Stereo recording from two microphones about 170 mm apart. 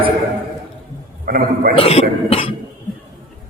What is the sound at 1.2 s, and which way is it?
Speech, 60° right (ahead or behind).